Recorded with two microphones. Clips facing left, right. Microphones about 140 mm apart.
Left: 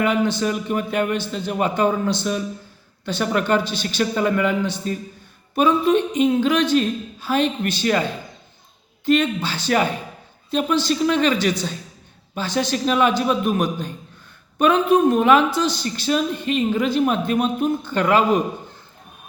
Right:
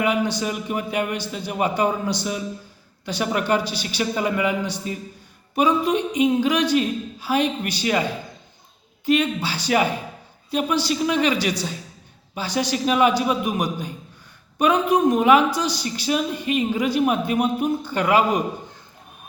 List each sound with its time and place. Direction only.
0.0 s a woman's voice: 15° right (ahead or behind)
9.0 s a woman's voice: 10° right (ahead or behind)